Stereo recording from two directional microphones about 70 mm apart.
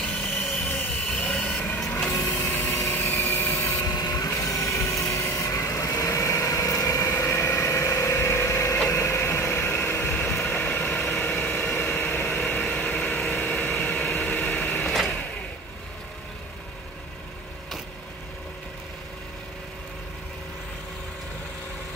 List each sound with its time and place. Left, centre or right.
0.0 s a sound: centre
0.7 s train: left
1.1 s train: centre
2.3 s vehicle: left
3.8 s vehicle: left
4.3 s vehicle: left
8.8 s a sound: left